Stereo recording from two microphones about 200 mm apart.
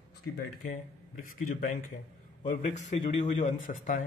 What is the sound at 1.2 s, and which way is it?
A man's voice, 45° left (ahead or behind).